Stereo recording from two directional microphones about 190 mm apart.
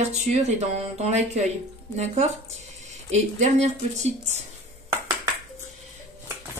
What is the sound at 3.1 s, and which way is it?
A woman's voice, 35° right (ahead or behind).